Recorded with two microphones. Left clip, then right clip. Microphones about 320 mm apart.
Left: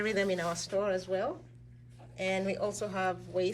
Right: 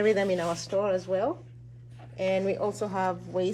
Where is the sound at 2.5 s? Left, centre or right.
Right.